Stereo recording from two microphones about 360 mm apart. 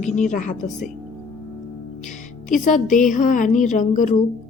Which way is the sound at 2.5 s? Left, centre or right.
Left.